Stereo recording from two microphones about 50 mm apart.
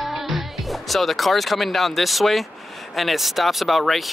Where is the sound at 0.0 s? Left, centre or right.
Centre.